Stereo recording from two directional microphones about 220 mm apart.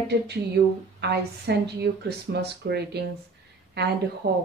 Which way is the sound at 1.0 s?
50° right (ahead or behind).